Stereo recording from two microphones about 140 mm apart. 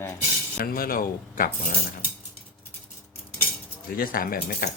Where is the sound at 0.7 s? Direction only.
90° left.